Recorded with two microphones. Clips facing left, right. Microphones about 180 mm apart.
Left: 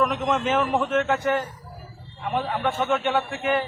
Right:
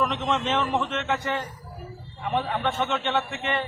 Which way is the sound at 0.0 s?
5° left (ahead or behind).